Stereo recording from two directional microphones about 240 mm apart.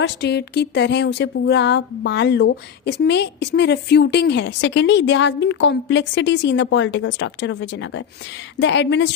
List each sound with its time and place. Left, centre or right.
0.0 s speech: left